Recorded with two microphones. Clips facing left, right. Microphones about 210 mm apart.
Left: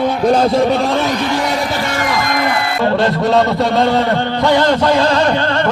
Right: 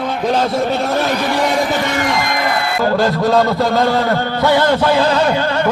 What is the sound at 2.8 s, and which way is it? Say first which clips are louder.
A man's voice: even; centre (ahead or behind).